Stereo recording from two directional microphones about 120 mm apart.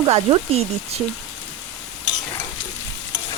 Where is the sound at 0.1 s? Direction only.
55° right (ahead or behind).